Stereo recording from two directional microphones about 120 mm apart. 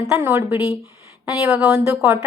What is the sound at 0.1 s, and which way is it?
A woman's voice, 20° right (ahead or behind).